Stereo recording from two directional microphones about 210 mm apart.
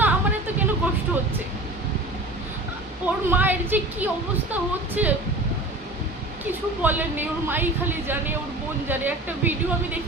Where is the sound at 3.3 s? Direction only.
10° right (ahead or behind).